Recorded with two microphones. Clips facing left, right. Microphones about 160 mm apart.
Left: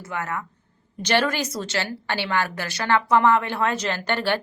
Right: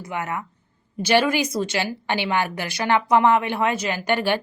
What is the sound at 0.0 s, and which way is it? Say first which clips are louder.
A woman's voice: right 1 dB; 15° right (ahead or behind).